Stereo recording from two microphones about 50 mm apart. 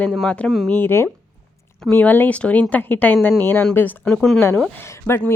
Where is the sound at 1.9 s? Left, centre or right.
Left.